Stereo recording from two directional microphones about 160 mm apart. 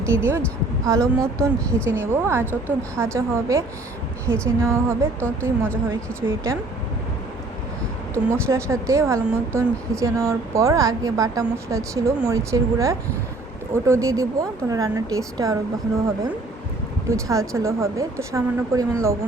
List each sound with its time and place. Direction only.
0.1 s a woman's voice: 15° right (ahead or behind)
8.1 s speech: 15° right (ahead or behind)
17.1 s speech: 20° right (ahead or behind)